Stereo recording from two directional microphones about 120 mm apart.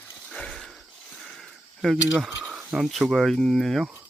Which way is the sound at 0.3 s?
5° left (ahead or behind).